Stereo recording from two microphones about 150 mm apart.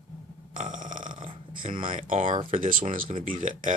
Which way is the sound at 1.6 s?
60° right (ahead or behind).